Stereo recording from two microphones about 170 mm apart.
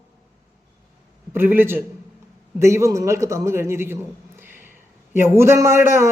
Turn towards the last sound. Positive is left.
turn(degrees=-15)  # may be behind; listen again after turning